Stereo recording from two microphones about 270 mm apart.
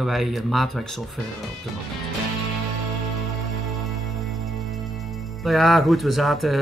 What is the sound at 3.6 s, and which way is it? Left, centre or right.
Music, centre.